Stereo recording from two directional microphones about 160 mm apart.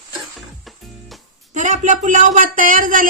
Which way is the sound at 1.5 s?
50° right (ahead or behind).